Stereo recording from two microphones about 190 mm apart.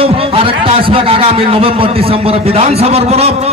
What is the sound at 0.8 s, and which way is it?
A man's voice, 30° right (ahead or behind).